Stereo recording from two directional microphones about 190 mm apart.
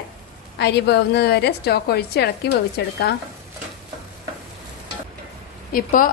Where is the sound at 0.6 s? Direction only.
60° left (ahead or behind).